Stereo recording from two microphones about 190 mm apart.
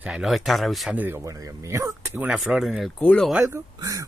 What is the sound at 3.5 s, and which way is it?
Mantra, 20° right (ahead or behind).